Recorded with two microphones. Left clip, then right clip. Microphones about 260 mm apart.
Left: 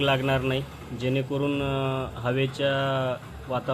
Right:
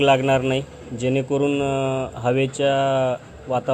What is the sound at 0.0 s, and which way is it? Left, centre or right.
A man's voice, centre.